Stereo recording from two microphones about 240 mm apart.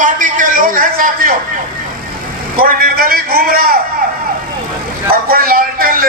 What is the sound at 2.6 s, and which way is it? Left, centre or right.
A man's voice, right.